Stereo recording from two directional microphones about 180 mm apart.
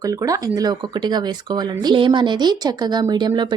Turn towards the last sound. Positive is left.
turn(degrees=-25)  # may be behind; listen again after turning